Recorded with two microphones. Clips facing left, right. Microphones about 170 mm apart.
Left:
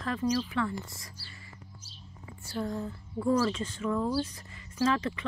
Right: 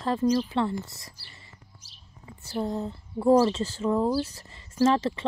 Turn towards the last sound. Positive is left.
turn(degrees=-30)  # may be behind; listen again after turning